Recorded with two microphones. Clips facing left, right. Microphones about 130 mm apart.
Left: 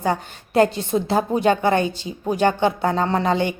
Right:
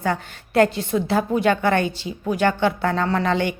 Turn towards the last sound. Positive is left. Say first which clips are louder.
# left 1 dB
turn(degrees=20)  # may be behind; listen again after turning